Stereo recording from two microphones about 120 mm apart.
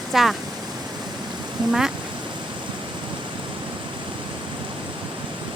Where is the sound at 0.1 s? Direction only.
Centre (ahead or behind).